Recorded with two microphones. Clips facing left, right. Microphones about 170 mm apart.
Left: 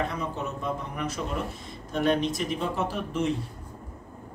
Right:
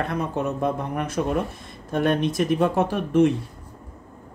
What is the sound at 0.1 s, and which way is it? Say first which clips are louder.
Speech: right 7 dB; 60° right (ahead or behind).